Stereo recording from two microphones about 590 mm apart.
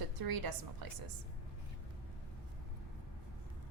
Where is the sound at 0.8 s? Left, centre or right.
Right.